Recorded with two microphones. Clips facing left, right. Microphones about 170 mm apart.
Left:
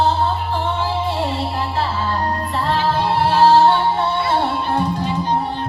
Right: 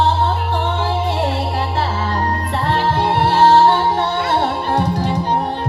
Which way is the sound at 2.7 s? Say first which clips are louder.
Right 2 dB; 65° right (ahead or behind).